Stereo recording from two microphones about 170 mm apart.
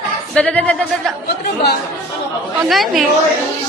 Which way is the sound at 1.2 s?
70° left (ahead or behind).